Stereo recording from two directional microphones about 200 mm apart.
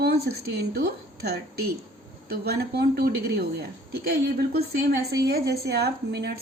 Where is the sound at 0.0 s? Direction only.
50° right (ahead or behind).